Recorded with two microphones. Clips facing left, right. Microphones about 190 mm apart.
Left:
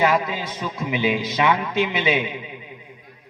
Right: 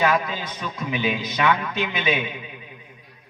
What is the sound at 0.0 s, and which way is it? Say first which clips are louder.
A man's voice: left 2 dB; 15° left (ahead or behind).